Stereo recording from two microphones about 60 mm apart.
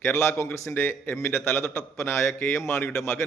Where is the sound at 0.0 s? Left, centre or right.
Left.